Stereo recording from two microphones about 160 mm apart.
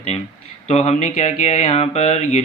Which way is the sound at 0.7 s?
40° left (ahead or behind).